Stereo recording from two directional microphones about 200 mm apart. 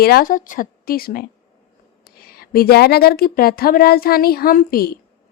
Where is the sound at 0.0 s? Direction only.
50° left (ahead or behind).